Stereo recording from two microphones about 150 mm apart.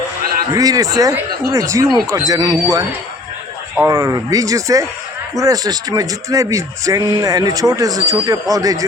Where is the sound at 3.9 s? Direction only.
20° right (ahead or behind).